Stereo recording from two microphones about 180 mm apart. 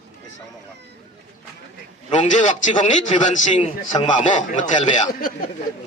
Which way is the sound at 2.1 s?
40° left (ahead or behind).